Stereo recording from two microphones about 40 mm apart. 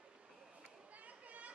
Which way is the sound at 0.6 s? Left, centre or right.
Right.